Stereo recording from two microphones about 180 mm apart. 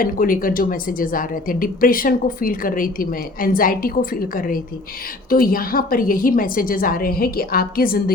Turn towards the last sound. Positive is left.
turn(degrees=55)  # may be behind; listen again after turning